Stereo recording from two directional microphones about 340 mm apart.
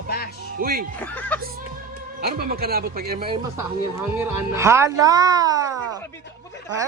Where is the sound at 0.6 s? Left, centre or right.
Right.